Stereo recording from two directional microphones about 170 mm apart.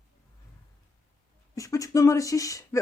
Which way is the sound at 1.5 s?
20° left (ahead or behind).